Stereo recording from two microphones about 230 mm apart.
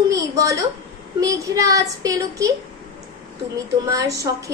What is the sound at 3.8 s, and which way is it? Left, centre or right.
Speech, centre.